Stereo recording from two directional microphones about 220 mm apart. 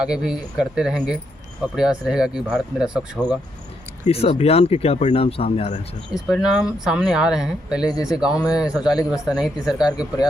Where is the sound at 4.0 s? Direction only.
25° left (ahead or behind).